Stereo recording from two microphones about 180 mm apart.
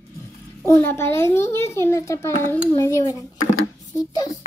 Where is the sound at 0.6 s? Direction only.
15° left (ahead or behind).